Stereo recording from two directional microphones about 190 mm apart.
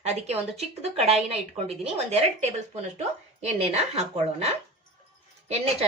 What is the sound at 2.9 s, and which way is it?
A woman's voice, 35° right (ahead or behind).